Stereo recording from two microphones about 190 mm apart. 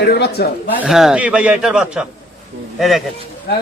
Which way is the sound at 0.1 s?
60° left (ahead or behind).